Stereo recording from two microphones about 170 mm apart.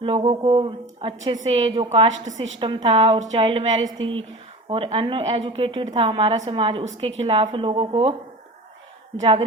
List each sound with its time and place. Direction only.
0.0 s a woman's voice: 35° right (ahead or behind)